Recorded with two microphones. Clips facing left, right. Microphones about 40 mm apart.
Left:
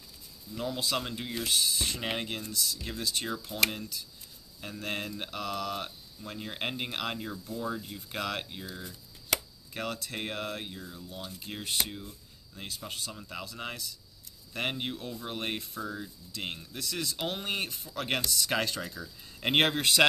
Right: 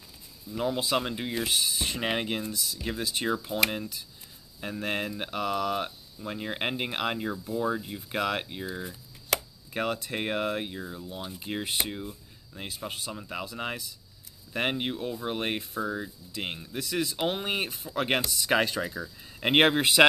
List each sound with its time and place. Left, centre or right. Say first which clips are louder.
0.5 s speech: right 5 dB; right